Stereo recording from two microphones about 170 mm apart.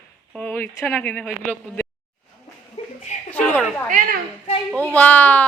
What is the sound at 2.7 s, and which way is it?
Chuckle, 40° left (ahead or behind).